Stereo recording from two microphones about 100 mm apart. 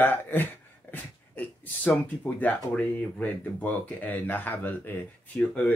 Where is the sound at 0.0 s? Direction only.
20° left (ahead or behind).